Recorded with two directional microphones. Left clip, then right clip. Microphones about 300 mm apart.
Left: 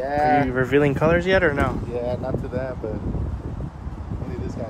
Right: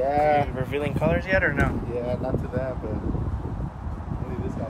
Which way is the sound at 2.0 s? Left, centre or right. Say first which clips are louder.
Left 2 dB; left.